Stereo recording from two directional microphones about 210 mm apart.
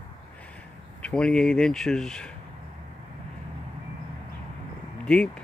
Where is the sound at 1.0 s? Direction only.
5° left (ahead or behind).